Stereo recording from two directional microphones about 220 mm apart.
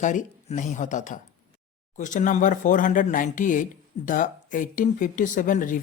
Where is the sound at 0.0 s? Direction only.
35° left (ahead or behind).